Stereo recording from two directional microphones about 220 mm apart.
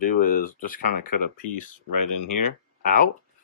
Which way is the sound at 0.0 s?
40° left (ahead or behind).